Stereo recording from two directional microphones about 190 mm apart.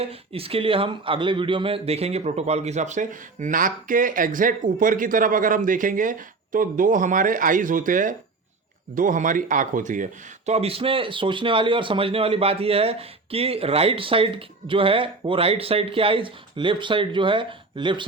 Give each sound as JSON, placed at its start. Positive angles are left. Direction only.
{"t": 0.0, "sound": "a man's voice", "side_deg": -30}